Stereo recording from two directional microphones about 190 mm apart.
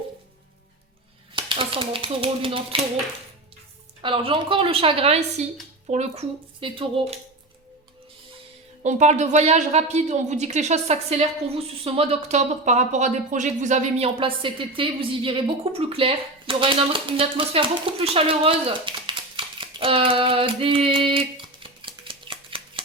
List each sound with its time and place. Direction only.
1.4 s speech: 25° right (ahead or behind)
4.0 s speech: 30° right (ahead or behind)
8.8 s speech: 40° right (ahead or behind)